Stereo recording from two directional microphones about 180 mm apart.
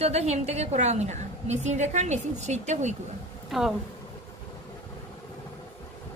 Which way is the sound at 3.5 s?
Centre (ahead or behind).